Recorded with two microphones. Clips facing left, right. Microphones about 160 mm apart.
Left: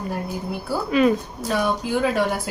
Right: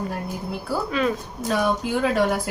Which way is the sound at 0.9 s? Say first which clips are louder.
Left 10 dB; 5° left (ahead or behind).